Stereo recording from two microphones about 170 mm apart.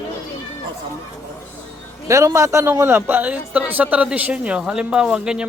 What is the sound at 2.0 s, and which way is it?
A man's voice, 20° right (ahead or behind).